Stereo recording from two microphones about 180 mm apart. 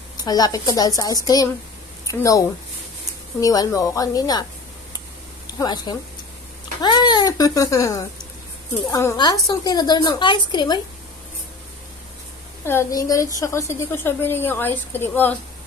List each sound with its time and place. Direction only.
0.2 s a woman's voice: 20° left (ahead or behind)
5.6 s a woman's voice: 25° left (ahead or behind)
12.6 s a woman's voice: 15° left (ahead or behind)